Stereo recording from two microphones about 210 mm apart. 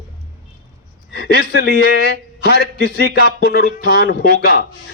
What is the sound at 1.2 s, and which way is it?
A man's voice, 50° left (ahead or behind).